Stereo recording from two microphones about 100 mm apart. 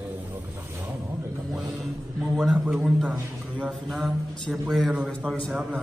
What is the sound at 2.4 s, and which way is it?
Mantra, centre (ahead or behind).